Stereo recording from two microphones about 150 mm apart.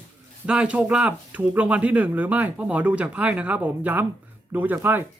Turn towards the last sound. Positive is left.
turn(degrees=-15)  # may be behind; listen again after turning